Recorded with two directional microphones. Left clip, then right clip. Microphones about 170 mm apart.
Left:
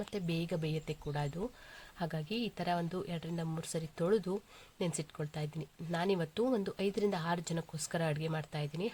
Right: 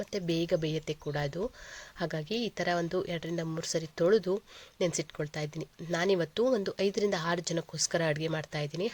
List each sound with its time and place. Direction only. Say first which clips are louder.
0.1 s speech: right 12 dB; 20° right (ahead or behind)